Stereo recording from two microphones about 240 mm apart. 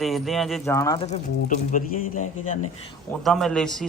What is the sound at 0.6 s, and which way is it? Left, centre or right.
Speech, centre.